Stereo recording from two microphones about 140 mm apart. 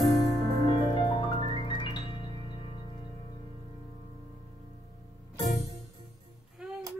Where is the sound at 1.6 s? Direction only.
35° left (ahead or behind).